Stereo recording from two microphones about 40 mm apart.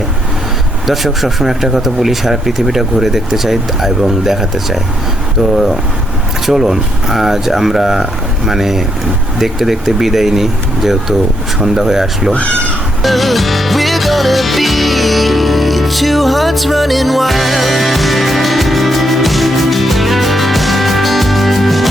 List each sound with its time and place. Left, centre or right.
0.9 s speech: centre
13.0 s music: centre